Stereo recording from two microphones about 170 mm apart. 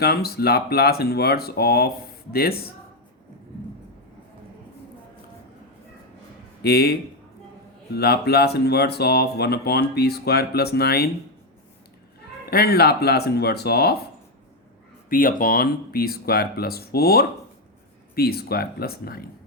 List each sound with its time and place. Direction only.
0.0 s speech: 65° left (ahead or behind)
6.6 s speech: 65° left (ahead or behind)
7.9 s speech: 70° left (ahead or behind)
12.5 s speech: 65° left (ahead or behind)
15.1 s speech: 55° left (ahead or behind)